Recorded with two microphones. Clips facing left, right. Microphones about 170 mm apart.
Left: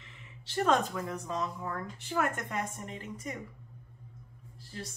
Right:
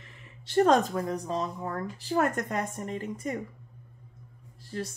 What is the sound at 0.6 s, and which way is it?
Speech, 40° right (ahead or behind).